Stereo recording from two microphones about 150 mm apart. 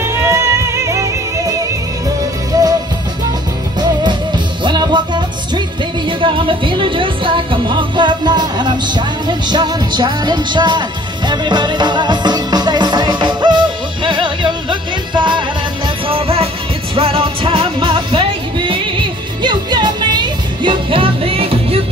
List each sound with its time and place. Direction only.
0.0 s music: 15° right (ahead or behind)
4.6 s music: 30° right (ahead or behind)